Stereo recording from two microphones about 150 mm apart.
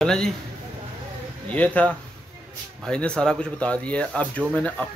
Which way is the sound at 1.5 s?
10° left (ahead or behind).